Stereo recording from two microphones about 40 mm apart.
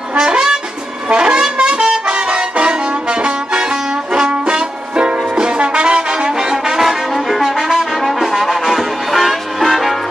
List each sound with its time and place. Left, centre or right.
0.1 s brass instrument: right
1.0 s a sound: right
1.6 s brass instrument: centre
6.8 s brass instrument: centre
7.9 s brass instrument: centre